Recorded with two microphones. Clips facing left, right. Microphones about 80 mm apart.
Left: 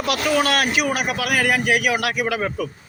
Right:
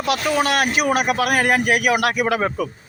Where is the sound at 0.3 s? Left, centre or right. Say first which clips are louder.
Left 1 dB; right.